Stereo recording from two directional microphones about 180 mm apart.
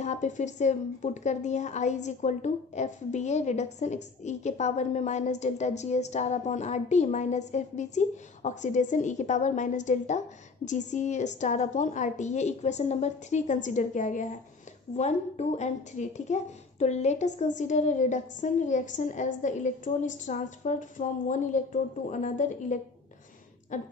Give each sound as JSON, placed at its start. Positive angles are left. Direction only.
{"t": 0.0, "sound": "a woman's voice", "side_deg": 40}